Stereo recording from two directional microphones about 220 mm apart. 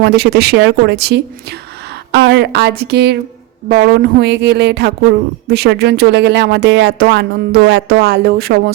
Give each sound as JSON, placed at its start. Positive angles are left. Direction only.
{"t": 0.0, "sound": "speech", "side_deg": -45}